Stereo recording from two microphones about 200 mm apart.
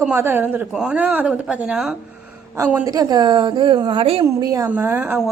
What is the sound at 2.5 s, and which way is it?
A woman's voice, 15° right (ahead or behind).